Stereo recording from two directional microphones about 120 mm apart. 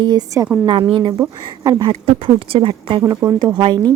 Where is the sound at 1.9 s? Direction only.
55° right (ahead or behind).